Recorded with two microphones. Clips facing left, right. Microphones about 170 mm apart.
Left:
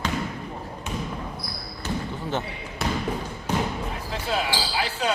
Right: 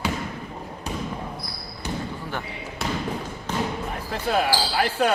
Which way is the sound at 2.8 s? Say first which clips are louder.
Left 1 dB; centre (ahead or behind).